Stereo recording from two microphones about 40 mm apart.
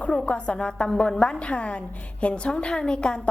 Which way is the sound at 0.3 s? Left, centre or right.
Left.